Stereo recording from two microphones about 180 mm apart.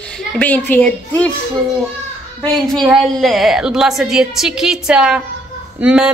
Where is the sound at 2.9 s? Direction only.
Centre (ahead or behind).